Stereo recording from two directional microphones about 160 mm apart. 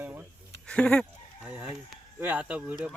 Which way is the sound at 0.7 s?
5° left (ahead or behind).